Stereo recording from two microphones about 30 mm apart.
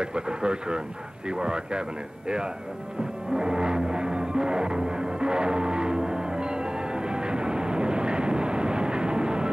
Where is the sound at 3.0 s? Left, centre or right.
Right.